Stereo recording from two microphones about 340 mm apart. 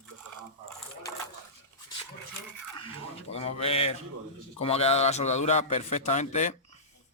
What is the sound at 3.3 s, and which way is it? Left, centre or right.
A man's voice, centre.